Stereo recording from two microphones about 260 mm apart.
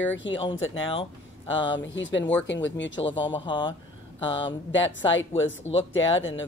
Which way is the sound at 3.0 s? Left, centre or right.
Centre.